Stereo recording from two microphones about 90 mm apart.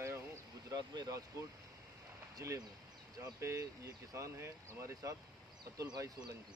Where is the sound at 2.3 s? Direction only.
35° right (ahead or behind).